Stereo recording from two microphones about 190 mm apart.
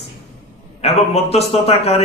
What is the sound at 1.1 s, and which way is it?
Speech, 30° left (ahead or behind).